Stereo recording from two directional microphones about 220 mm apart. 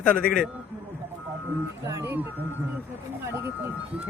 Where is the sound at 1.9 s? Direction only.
10° right (ahead or behind).